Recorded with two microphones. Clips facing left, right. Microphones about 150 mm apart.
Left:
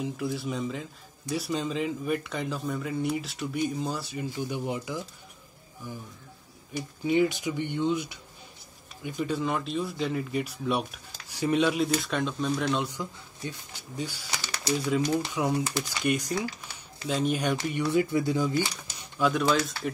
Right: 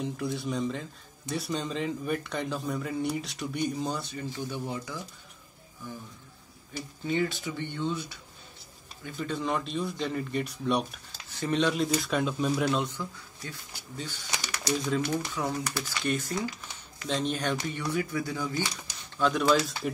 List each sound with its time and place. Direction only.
0.0 s speech: centre (ahead or behind)
6.7 s speech: 15° left (ahead or behind); by 12.8 s 5° right (ahead or behind)
12.8 s speech: 15° left (ahead or behind)
17.9 s speech: 20° left (ahead or behind)
19.1 s speech: 5° left (ahead or behind)